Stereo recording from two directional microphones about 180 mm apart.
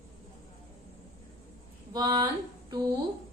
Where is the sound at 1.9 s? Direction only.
20° right (ahead or behind).